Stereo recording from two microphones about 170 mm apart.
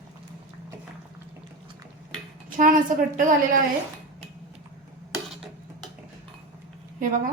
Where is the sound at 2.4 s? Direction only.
50° right (ahead or behind).